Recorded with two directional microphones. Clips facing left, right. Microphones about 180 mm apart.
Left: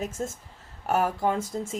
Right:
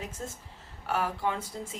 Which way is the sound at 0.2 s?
40° left (ahead or behind).